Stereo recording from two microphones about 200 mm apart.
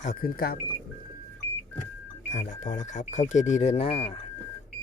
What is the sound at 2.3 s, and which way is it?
Speech, 40° left (ahead or behind).